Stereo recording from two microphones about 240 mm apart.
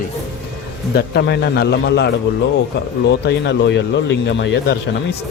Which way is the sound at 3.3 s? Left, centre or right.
Left.